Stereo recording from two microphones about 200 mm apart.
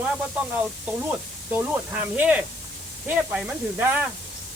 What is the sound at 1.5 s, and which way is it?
Speech, 10° right (ahead or behind).